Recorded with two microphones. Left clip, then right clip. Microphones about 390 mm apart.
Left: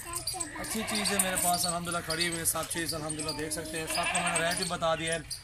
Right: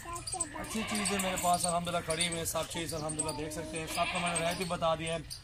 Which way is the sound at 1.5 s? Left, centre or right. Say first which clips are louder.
Even; centre.